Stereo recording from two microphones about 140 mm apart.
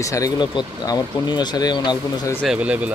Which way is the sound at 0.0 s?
25° left (ahead or behind).